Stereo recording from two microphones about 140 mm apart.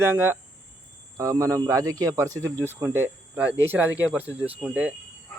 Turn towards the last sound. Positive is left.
turn(degrees=-10)  # may be behind; listen again after turning